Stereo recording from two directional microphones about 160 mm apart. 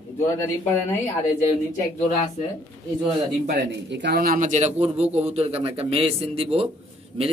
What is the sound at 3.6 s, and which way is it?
A man's voice, 90° right.